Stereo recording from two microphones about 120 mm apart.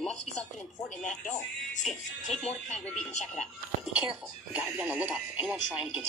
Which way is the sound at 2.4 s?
75° left (ahead or behind).